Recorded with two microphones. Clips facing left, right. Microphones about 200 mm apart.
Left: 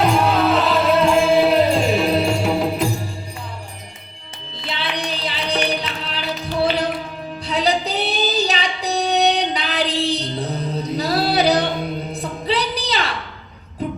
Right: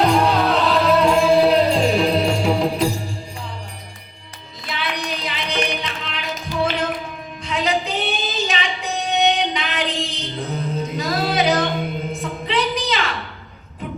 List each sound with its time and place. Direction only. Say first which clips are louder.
0.0 s music: even; centre (ahead or behind)
4.5 s music: left 1 dB; 30° left (ahead or behind)
7.4 s female singing: left 2 dB; 35° left (ahead or behind)
12.1 s a sound: left 1 dB; 35° left (ahead or behind)